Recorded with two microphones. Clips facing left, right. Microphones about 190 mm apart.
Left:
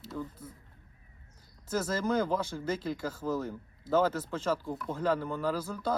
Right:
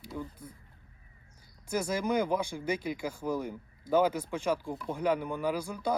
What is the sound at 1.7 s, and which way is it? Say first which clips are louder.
Speech: even; 15° right (ahead or behind).